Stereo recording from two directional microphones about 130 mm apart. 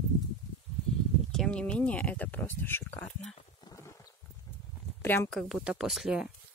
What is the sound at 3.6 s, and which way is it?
Clip-clop, 25° left (ahead or behind).